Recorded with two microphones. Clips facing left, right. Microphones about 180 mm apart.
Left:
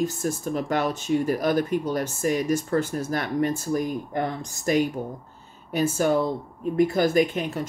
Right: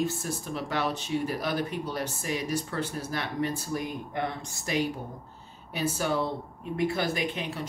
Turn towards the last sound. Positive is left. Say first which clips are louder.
# left 9 dB
turn(degrees=45)  # may be behind; listen again after turning